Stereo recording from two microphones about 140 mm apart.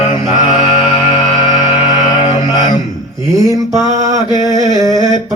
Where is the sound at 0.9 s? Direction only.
40° left (ahead or behind).